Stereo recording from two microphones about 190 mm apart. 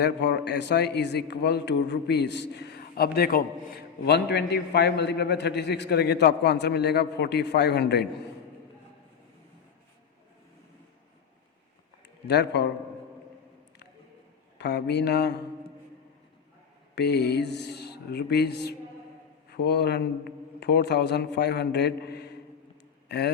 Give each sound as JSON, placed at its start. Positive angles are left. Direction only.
{"t": 0.0, "sound": "a man's voice", "side_deg": 65}
{"t": 12.3, "sound": "a man's voice", "side_deg": 60}
{"t": 14.6, "sound": "a man's voice", "side_deg": 60}
{"t": 16.9, "sound": "a man's voice", "side_deg": 60}